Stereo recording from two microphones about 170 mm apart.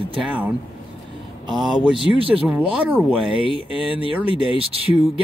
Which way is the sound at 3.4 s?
30° left (ahead or behind).